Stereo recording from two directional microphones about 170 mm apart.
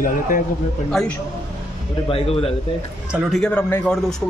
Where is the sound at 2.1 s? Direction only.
35° left (ahead or behind).